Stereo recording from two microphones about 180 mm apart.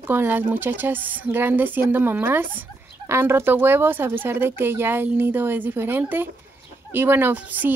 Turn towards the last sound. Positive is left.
turn(degrees=-10)  # may be behind; listen again after turning